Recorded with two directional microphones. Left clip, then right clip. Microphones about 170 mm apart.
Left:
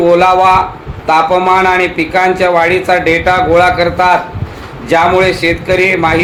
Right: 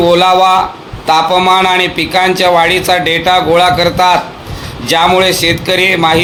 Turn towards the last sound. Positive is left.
turn(degrees=-45)  # may be behind; listen again after turning